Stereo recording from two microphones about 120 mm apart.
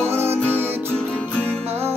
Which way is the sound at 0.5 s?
15° right (ahead or behind).